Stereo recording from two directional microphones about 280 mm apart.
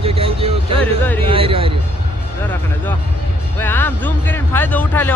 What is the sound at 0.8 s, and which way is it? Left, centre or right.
Speech, centre.